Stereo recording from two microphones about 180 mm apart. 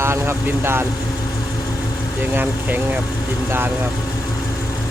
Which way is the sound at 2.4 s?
10° right (ahead or behind).